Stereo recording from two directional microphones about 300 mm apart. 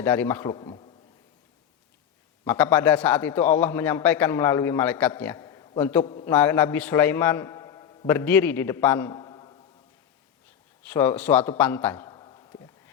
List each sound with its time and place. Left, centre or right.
0.0 s a man's voice: centre
2.4 s a man's voice: centre
6.3 s a man's voice: centre
10.8 s a man's voice: centre